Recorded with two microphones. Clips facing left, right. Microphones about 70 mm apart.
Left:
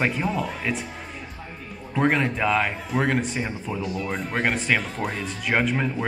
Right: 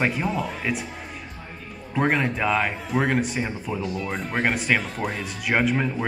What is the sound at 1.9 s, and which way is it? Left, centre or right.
A man's voice, centre.